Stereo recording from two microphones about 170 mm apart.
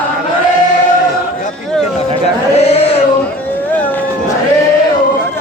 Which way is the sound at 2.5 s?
35° left (ahead or behind).